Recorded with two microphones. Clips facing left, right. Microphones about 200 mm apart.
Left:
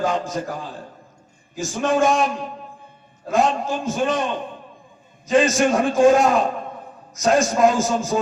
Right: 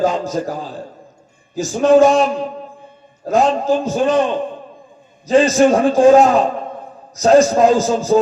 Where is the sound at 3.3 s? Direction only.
40° right (ahead or behind).